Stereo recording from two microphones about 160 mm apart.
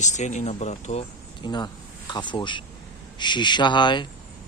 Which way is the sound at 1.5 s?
25° left (ahead or behind).